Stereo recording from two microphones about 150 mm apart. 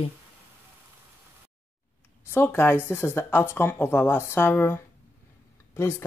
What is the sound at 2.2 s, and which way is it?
Speech, 15° left (ahead or behind).